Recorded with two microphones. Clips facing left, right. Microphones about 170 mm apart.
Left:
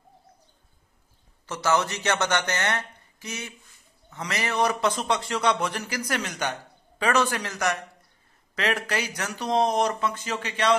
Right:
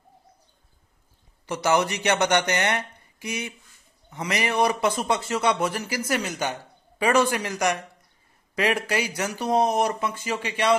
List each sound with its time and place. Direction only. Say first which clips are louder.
1.4 s a man's voice: right 2 dB; 15° right (ahead or behind)